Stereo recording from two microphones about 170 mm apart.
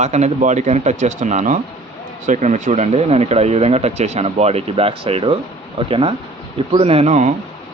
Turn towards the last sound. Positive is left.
turn(degrees=-45)  # may be behind; listen again after turning